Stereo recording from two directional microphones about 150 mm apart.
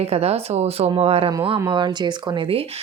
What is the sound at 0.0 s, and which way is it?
A woman's voice, 45° right (ahead or behind).